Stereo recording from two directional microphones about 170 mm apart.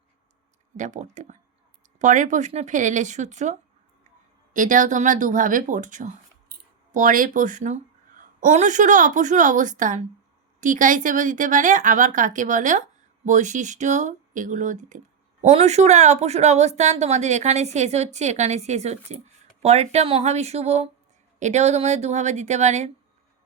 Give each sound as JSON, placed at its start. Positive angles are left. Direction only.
{"t": 0.8, "sound": "a woman's voice", "side_deg": -45}